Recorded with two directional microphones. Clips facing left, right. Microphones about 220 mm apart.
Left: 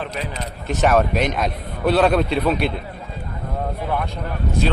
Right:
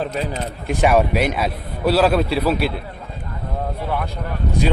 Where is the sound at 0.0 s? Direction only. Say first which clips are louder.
Right 4 dB; 35° right (ahead or behind).